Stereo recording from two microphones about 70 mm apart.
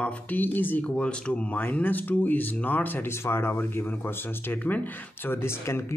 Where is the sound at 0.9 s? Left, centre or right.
Centre; by 6.0 s left.